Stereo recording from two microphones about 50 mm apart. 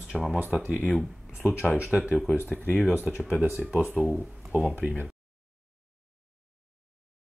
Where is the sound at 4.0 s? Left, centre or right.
Right.